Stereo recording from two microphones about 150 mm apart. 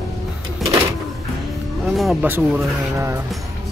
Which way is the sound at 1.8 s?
Centre (ahead or behind).